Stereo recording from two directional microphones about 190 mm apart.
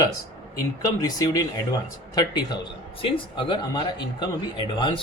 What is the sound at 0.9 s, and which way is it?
Speech, 20° left (ahead or behind).